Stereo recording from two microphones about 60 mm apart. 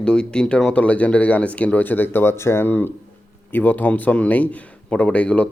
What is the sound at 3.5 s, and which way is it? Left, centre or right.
Speech, left.